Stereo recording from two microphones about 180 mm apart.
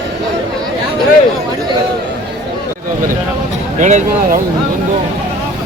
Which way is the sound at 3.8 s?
40° right (ahead or behind).